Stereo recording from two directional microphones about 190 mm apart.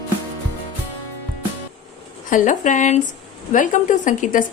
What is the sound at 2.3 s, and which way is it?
A woman's voice, 40° left (ahead or behind).